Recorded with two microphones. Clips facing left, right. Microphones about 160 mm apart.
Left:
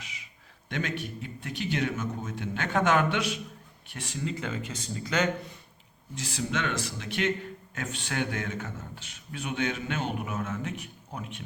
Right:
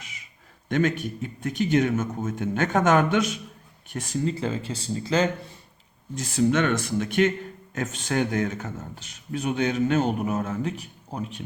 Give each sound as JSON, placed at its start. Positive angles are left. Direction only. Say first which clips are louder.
{"t": 0.7, "sound": "a man's voice", "louder": "right 9 dB", "side_deg": -45}
{"t": 6.1, "sound": "a man's voice", "louder": "right 10 dB", "side_deg": -45}